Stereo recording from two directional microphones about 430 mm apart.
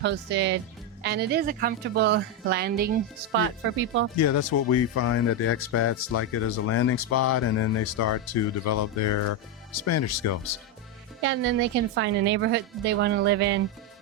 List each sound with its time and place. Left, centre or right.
0.0 s a woman's voice: right
4.2 s speech: left
11.2 s a woman's voice: right